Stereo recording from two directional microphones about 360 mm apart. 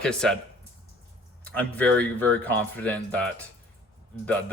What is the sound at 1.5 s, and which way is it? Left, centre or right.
Speech, centre.